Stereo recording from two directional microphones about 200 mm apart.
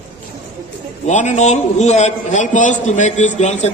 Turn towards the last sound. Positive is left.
turn(degrees=35)  # may be behind; listen again after turning